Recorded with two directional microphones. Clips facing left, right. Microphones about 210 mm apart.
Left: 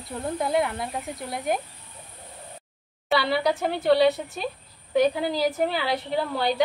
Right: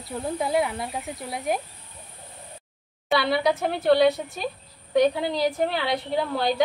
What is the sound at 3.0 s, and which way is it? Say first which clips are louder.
Speech: right 1 dB; centre (ahead or behind).